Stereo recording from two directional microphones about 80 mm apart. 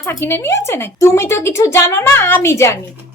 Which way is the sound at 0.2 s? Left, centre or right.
Left.